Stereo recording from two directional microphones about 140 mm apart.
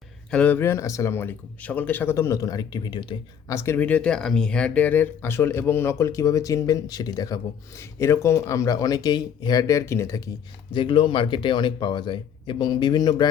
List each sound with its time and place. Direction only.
0.3 s speech: 10° left (ahead or behind); by 3.2 s 35° left (ahead or behind)
3.5 s speech: 20° left (ahead or behind)
10.7 s speech: 35° left (ahead or behind)